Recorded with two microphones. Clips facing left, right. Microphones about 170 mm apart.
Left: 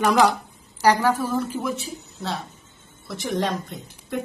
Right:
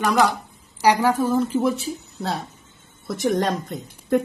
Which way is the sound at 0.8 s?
15° right (ahead or behind).